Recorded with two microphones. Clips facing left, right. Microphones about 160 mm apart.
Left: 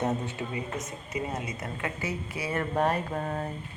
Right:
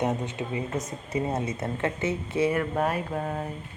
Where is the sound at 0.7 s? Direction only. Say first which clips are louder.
Right 4 dB; 30° right (ahead or behind).